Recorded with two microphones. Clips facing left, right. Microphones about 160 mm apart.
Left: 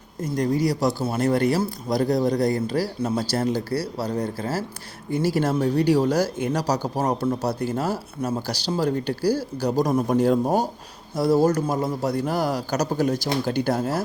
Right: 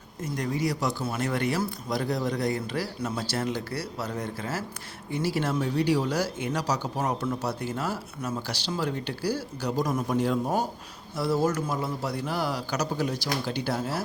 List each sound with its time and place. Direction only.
0.2 s a man's voice: 35° left (ahead or behind)